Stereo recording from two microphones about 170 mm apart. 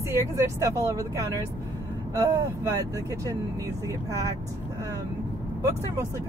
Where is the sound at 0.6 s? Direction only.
20° right (ahead or behind).